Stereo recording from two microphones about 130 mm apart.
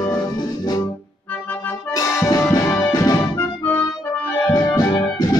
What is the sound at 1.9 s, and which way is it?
Music, 30° left (ahead or behind).